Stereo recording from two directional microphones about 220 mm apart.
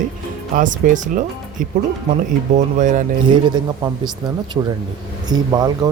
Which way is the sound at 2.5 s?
35° right (ahead or behind).